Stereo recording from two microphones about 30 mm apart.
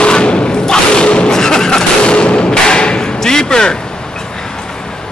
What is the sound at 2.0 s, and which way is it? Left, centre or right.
Thump, left.